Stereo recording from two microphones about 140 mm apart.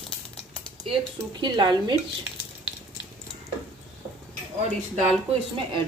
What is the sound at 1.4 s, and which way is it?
Speech, 30° right (ahead or behind).